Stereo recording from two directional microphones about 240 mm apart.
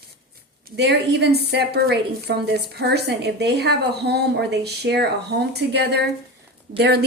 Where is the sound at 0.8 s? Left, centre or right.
Right.